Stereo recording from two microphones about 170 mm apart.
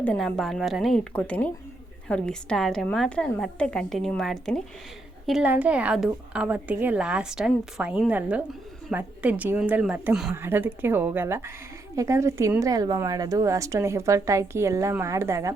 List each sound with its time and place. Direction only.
0.0 s a woman's voice: 5° left (ahead or behind); by 15.5 s 15° right (ahead or behind)